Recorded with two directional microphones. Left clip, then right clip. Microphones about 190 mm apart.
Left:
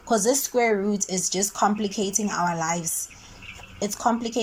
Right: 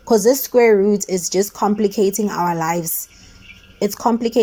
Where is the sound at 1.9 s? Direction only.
80° right.